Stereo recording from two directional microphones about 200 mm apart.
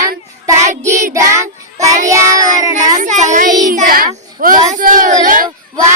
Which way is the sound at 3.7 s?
45° right (ahead or behind).